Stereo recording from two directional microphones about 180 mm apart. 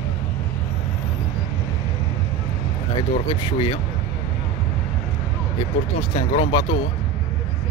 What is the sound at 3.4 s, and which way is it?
Speech, 30° left (ahead or behind).